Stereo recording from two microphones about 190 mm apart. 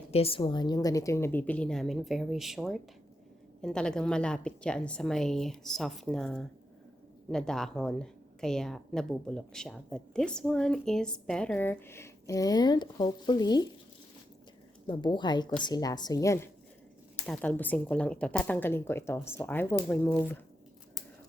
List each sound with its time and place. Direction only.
0.1 s a woman's voice: 30° left (ahead or behind)
14.8 s a woman's voice: 25° left (ahead or behind)